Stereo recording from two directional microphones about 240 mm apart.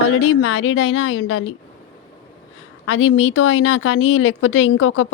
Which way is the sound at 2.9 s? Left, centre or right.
Left.